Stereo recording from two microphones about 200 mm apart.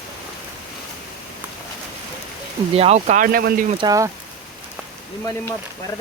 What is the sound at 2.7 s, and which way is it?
Speech, 30° right (ahead or behind).